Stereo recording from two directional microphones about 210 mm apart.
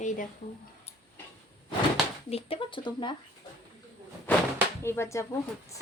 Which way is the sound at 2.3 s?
25° left (ahead or behind).